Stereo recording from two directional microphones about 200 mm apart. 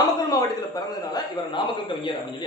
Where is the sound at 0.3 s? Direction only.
20° left (ahead or behind).